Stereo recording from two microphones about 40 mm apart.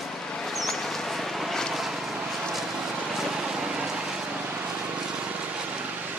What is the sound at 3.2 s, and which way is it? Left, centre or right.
Vehicle, centre.